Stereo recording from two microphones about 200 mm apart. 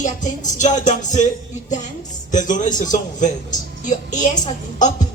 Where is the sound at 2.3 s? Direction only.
40° left (ahead or behind).